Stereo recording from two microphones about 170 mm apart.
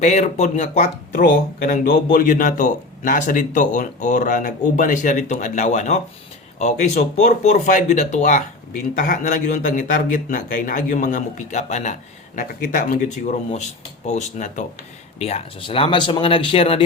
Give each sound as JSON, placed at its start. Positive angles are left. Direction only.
{"t": 0.0, "sound": "speech", "side_deg": 45}
{"t": 1.1, "sound": "speech", "side_deg": 55}
{"t": 15.2, "sound": "speech", "side_deg": 35}